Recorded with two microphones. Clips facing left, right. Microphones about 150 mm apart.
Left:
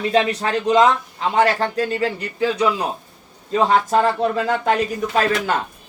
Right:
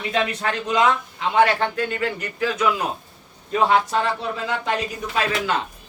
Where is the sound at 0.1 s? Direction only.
35° left (ahead or behind).